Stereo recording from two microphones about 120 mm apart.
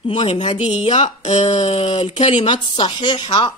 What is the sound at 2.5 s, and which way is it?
Speech, 45° left (ahead or behind).